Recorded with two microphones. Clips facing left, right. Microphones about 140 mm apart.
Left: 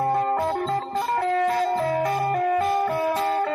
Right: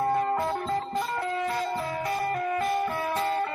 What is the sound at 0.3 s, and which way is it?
Music, 50° left (ahead or behind).